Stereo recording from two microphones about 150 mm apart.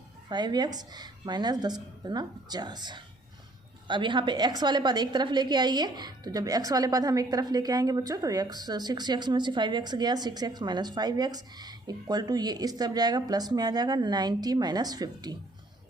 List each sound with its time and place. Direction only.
0.3 s a woman's voice: 30° right (ahead or behind)